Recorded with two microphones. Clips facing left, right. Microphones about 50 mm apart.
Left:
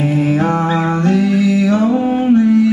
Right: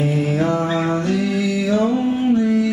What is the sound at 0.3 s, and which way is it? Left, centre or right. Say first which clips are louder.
Music: left 4 dB; left.